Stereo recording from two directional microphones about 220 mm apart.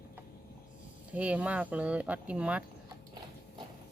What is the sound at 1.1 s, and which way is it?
Speech, 5° right (ahead or behind).